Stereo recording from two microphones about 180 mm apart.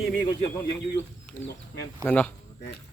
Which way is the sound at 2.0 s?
10° left (ahead or behind).